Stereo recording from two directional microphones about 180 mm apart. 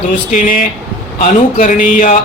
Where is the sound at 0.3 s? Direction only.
50° left (ahead or behind).